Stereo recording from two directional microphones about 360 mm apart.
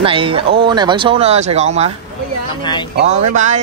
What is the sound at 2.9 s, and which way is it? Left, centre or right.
Speech, centre.